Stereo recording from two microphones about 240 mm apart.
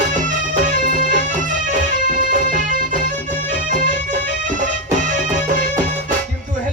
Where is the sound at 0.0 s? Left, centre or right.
Right.